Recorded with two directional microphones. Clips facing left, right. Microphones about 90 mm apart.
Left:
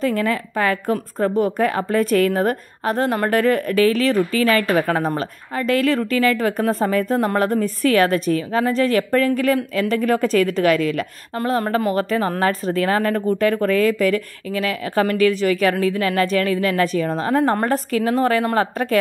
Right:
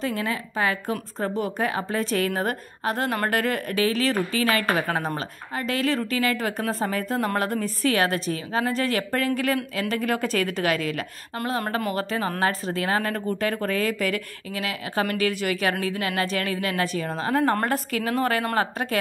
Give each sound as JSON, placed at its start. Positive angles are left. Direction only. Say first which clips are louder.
{"t": 0.0, "sound": "a woman's voice", "louder": "left 7 dB", "side_deg": 55}
{"t": 1.2, "sound": "speech", "louder": "left 8 dB", "side_deg": 40}